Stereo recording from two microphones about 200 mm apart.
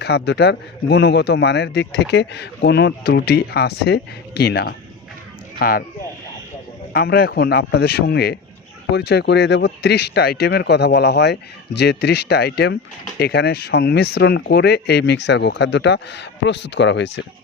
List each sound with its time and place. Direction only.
0.0 s speech: 55° left (ahead or behind)
6.9 s speech: 50° left (ahead or behind)